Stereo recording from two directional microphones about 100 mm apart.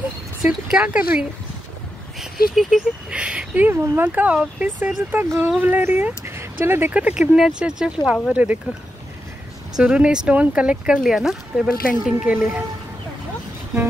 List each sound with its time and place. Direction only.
0.4 s speech: 10° right (ahead or behind)
9.8 s speech: 10° right (ahead or behind)
12.4 s speech: 25° right (ahead or behind)